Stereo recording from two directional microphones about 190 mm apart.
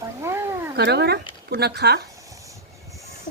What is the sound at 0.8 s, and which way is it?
A woman's voice, 60° right (ahead or behind).